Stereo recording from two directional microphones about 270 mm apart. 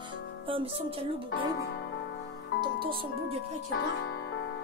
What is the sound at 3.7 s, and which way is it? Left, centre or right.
Music, left.